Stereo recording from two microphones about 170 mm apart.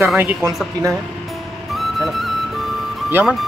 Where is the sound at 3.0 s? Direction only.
10° right (ahead or behind).